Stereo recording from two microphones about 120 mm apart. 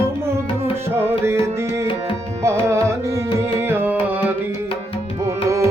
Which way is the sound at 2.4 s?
25° right (ahead or behind).